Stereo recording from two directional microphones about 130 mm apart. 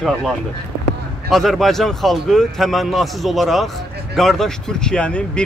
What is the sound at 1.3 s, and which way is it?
A man's voice, centre (ahead or behind).